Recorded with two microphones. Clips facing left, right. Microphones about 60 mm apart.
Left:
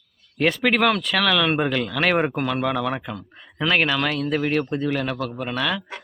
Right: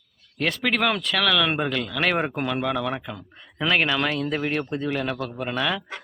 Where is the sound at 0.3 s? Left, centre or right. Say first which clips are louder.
Left 4 dB; centre.